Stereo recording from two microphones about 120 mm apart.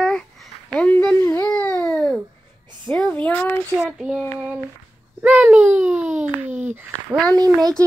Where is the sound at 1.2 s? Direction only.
25° left (ahead or behind).